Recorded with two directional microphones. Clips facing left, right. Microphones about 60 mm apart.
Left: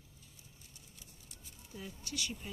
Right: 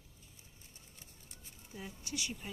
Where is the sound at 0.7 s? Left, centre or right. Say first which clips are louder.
Even; right.